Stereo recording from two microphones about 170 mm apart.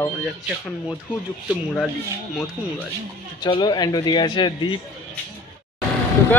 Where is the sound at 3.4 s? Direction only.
25° left (ahead or behind).